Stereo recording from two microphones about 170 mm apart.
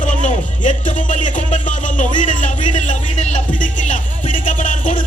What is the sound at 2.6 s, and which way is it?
Music, 45° left (ahead or behind).